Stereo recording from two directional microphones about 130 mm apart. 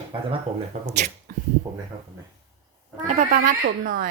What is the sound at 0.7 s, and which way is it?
Speech, 80° right.